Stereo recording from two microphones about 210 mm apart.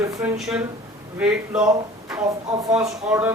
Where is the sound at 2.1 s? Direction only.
15° right (ahead or behind).